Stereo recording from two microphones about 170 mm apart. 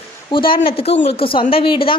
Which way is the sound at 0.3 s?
30° left (ahead or behind).